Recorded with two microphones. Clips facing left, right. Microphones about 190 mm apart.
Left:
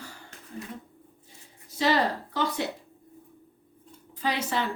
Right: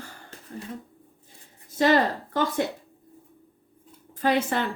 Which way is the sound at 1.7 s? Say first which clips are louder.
Right 4 dB; 50° right (ahead or behind).